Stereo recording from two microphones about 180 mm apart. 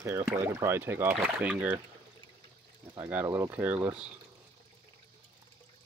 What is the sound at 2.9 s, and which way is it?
Speech, 10° right (ahead or behind).